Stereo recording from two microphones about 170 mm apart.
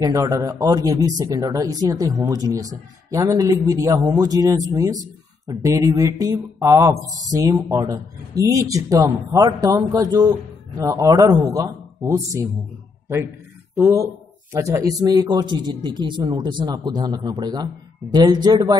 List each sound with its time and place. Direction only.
0.0 s speech: 20° right (ahead or behind)
13.7 s speech: 20° right (ahead or behind)